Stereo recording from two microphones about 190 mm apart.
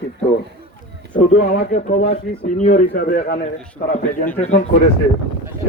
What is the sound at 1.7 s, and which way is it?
A man's voice, 40° left (ahead or behind).